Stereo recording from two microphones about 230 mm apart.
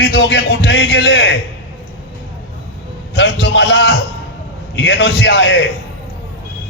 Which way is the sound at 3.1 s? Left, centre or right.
Left.